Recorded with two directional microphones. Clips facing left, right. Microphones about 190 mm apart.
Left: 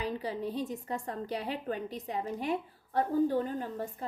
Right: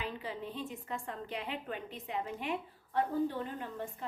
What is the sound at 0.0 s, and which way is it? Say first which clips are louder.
A woman's voice: left 6 dB; 40° left (ahead or behind).